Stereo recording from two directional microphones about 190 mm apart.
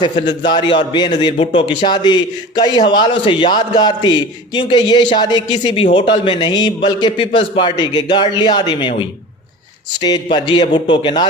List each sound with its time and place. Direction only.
0.0 s a man's voice: 25° left (ahead or behind)
10.3 s a man's voice: 25° left (ahead or behind)